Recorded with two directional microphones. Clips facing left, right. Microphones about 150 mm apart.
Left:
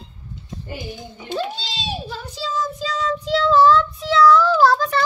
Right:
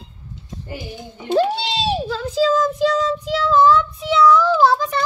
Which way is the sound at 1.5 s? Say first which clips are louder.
Right 9 dB; 75° right (ahead or behind).